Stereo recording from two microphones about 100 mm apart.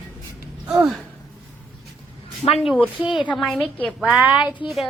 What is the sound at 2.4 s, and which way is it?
Speech, 90° left.